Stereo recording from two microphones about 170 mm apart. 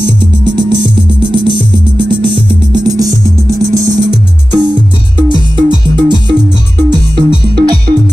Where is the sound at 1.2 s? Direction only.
30° right (ahead or behind).